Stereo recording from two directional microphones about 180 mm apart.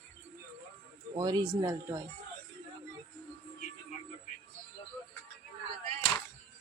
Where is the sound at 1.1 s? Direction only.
20° right (ahead or behind).